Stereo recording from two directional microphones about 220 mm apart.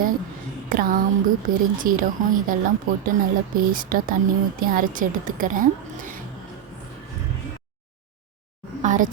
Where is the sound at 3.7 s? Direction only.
40° right (ahead or behind).